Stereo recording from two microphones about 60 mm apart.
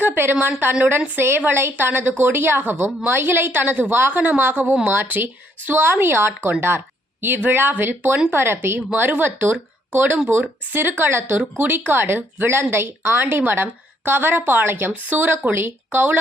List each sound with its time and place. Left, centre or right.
0.0 s speech: right